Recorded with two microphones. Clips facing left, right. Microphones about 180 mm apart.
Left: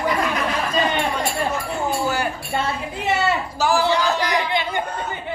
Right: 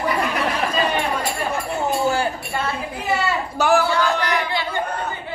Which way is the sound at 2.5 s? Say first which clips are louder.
Left 1 dB; 25° left (ahead or behind).